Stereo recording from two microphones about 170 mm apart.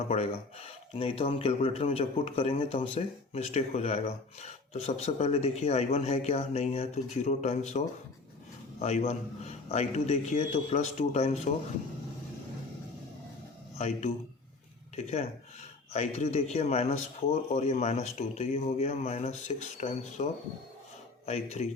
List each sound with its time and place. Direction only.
0.1 s speech: 35° left (ahead or behind)
13.7 s speech: 40° left (ahead or behind)
21.2 s speech: 40° left (ahead or behind)